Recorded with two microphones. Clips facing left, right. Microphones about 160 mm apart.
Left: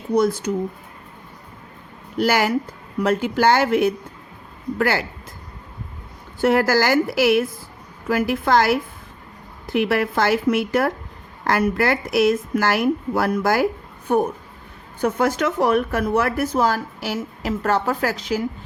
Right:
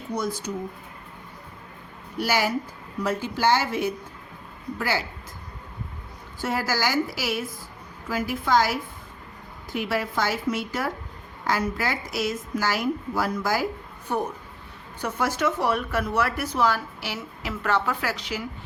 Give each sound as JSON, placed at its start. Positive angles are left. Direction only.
{"t": 0.2, "sound": "speech", "side_deg": 70}
{"t": 2.2, "sound": "a woman's voice", "side_deg": 60}
{"t": 6.4, "sound": "a woman's voice", "side_deg": 60}